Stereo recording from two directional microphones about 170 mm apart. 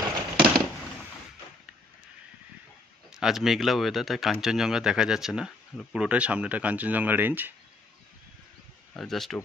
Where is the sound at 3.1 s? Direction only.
5° right (ahead or behind).